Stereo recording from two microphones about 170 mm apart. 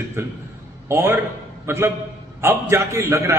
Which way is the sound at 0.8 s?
15° right (ahead or behind).